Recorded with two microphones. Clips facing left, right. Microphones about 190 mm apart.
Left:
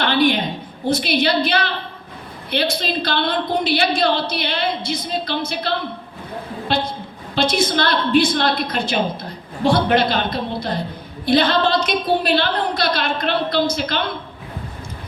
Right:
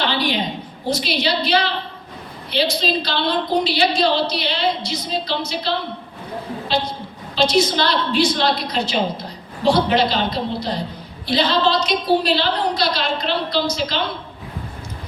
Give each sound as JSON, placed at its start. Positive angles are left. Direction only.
{"t": 0.0, "sound": "a woman's voice", "side_deg": 55}